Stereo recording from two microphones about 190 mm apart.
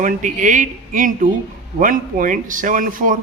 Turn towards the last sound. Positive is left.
turn(degrees=-45)  # may be behind; listen again after turning